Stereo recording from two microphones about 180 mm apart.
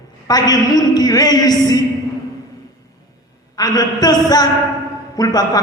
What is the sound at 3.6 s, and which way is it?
A man's voice, 20° left (ahead or behind).